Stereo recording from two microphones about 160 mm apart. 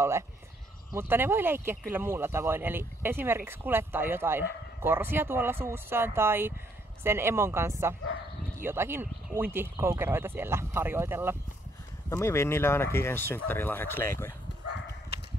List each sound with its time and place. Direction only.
0.9 s speech: 15° right (ahead or behind)
12.1 s speech: 15° left (ahead or behind)
14.7 s a sound: 90° left